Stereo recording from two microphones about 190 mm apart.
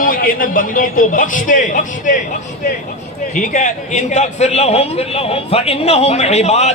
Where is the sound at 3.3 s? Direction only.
40° left (ahead or behind).